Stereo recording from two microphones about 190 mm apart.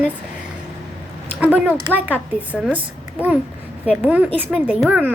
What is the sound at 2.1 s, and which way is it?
Speech, 10° left (ahead or behind).